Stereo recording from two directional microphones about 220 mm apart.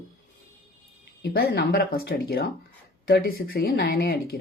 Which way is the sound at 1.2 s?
45° left (ahead or behind).